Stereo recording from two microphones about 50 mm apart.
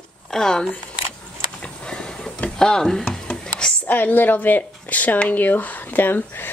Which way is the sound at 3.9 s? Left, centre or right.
Left.